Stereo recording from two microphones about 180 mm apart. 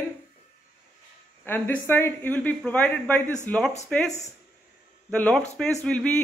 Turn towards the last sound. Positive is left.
turn(degrees=5)  # may be behind; listen again after turning